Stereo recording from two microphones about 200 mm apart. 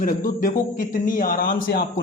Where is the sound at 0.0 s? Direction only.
40° left (ahead or behind).